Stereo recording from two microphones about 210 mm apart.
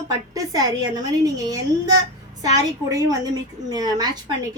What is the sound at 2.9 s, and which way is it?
A woman's voice, 15° right (ahead or behind).